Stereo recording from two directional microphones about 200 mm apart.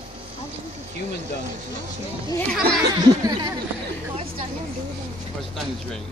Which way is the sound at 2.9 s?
20° right (ahead or behind).